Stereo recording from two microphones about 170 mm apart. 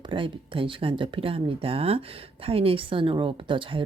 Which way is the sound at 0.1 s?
30° right (ahead or behind).